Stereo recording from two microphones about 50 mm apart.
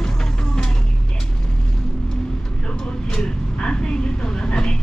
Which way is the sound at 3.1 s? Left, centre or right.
Centre.